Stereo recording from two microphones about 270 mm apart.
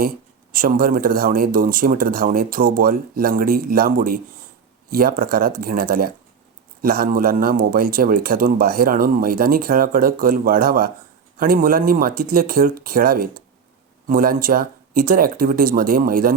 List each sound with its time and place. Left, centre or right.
0.5 s a man's voice: right